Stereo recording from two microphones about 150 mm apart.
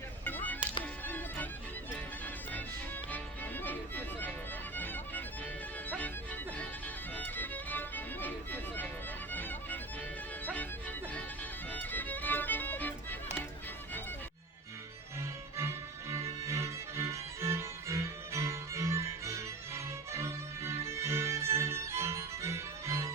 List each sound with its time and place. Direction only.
0.3 s music: 10° left (ahead or behind)
15.5 s violin: 20° right (ahead or behind)